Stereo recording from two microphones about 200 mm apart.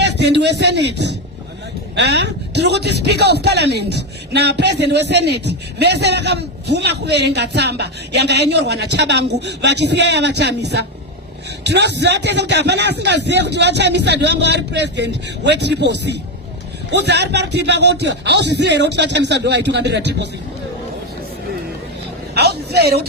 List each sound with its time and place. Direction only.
0.0 s a man's voice: 55° right (ahead or behind)
22.4 s a man's voice: 50° right (ahead or behind)